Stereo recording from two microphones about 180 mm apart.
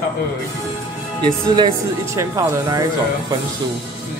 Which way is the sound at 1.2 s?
25° right (ahead or behind).